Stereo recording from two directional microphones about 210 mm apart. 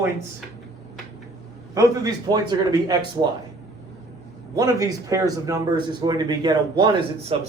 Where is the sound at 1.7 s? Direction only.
15° right (ahead or behind).